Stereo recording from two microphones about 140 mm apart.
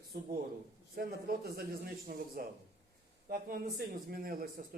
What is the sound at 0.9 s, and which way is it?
A man's voice, 90° right.